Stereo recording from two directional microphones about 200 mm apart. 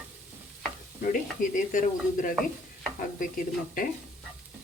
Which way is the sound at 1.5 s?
40° left (ahead or behind).